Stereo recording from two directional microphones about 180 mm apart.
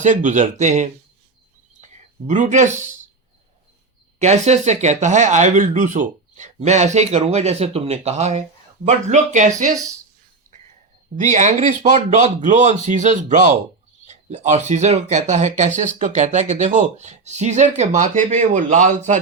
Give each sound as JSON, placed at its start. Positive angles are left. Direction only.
{"t": 0.0, "sound": "speech", "side_deg": -45}
{"t": 4.2, "sound": "speech", "side_deg": -40}
{"t": 11.2, "sound": "speech", "side_deg": -45}